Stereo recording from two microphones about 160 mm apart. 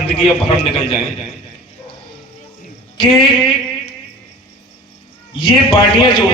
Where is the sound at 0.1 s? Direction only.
35° left (ahead or behind).